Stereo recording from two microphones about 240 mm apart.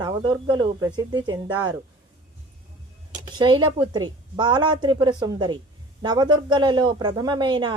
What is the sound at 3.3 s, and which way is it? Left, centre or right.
A man's voice, centre.